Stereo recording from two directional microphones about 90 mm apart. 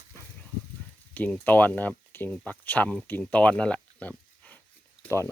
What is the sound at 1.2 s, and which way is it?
Speech, 20° left (ahead or behind).